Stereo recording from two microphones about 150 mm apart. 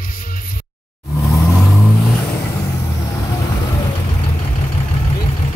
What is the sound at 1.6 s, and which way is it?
Vehicle, centre (ahead or behind).